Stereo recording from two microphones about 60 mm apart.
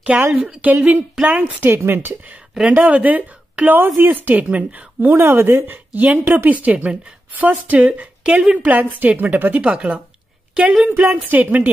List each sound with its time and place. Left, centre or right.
0.3 s speech: right
1.7 s speech: right
2.7 s speech: right
5.1 s speech: right
5.7 s speech: right
8.6 s speech: right
11.1 s speech: right